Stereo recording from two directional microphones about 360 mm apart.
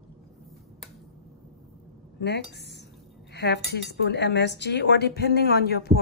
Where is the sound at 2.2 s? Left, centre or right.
Left.